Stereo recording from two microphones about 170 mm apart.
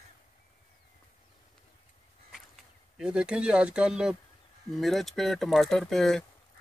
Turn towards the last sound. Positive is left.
turn(degrees=5)  # may be behind; listen again after turning